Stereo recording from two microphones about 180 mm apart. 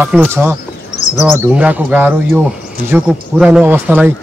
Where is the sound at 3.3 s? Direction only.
5° right (ahead or behind).